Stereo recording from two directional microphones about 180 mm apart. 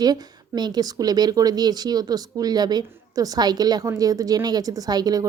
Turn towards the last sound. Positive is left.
turn(degrees=-20)  # may be behind; listen again after turning